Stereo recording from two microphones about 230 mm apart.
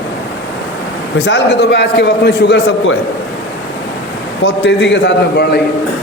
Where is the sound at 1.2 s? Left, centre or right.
Left.